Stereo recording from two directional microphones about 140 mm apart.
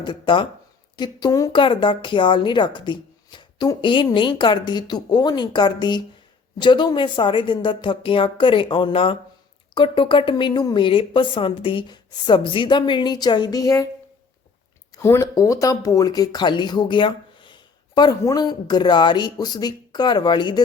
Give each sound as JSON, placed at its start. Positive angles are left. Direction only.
{"t": 0.0, "sound": "speech", "side_deg": 35}
{"t": 14.9, "sound": "speech", "side_deg": 20}